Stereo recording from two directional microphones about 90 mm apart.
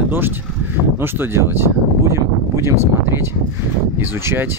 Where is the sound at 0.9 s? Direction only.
25° right (ahead or behind).